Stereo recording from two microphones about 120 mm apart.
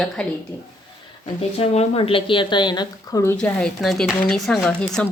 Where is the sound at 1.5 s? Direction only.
60° left (ahead or behind); by 3.3 s 30° left (ahead or behind).